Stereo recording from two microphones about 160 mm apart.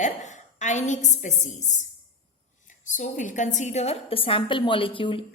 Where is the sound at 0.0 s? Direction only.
50° left (ahead or behind).